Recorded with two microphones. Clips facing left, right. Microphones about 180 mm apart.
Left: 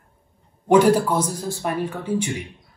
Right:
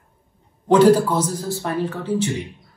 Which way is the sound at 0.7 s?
10° left (ahead or behind).